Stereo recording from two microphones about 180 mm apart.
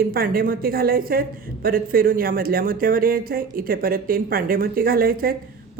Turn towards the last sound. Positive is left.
turn(degrees=-55)  # may be behind; listen again after turning